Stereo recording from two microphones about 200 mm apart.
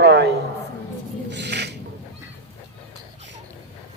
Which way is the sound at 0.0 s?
60° right (ahead or behind).